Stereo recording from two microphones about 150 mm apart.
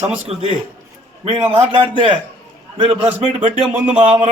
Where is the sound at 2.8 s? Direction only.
35° right (ahead or behind).